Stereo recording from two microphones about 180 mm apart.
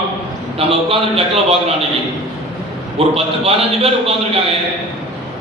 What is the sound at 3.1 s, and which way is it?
A man's voice, 35° right (ahead or behind).